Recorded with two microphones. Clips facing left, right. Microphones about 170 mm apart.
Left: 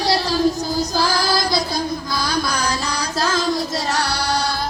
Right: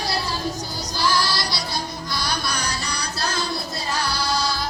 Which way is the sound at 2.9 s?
90° left.